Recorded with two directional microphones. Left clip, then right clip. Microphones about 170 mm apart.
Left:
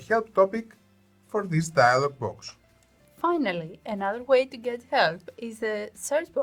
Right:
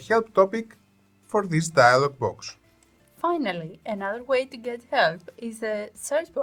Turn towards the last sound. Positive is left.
turn(degrees=15)  # may be behind; listen again after turning